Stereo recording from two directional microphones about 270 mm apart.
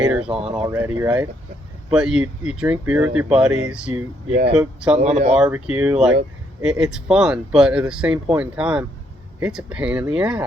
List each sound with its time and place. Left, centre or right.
0.0 s speech: centre
5.0 s speech: right
5.4 s speech: centre